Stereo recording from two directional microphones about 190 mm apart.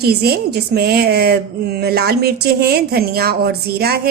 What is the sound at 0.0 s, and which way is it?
A woman's voice, 55° right (ahead or behind).